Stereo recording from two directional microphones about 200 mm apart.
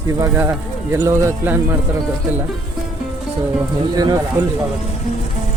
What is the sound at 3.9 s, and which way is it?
Speech, 20° right (ahead or behind).